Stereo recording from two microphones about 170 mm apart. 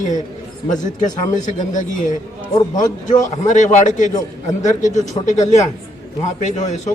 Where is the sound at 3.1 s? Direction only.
45° left (ahead or behind).